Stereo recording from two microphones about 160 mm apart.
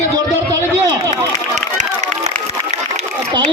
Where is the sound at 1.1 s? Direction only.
45° right (ahead or behind).